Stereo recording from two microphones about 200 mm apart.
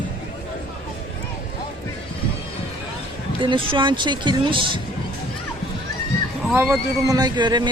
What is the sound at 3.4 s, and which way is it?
Speech, 25° right (ahead or behind).